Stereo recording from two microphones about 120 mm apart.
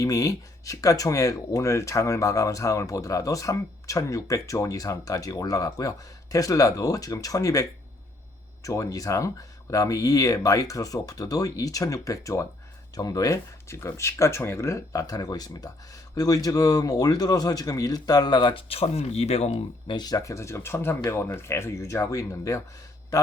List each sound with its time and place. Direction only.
0.0 s speech: 30° left (ahead or behind); by 19.6 s 65° left (ahead or behind)
19.9 s speech: 35° left (ahead or behind)